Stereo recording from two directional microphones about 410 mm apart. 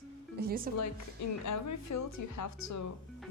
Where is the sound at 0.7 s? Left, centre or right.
Left.